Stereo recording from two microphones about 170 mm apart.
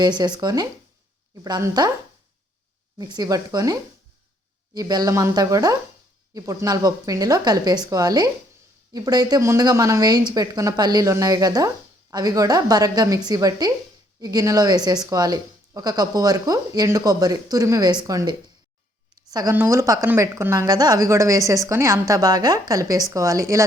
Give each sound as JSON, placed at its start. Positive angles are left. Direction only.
{"t": 0.0, "sound": "a woman's voice", "side_deg": -25}
{"t": 3.0, "sound": "a woman's voice", "side_deg": -25}